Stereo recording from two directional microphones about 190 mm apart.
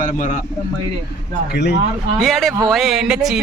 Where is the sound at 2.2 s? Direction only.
Centre (ahead or behind).